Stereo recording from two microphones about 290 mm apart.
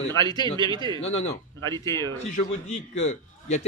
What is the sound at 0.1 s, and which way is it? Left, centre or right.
Speech, centre.